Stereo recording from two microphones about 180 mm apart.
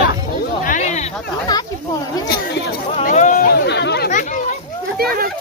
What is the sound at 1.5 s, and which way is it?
Speech, 20° left (ahead or behind).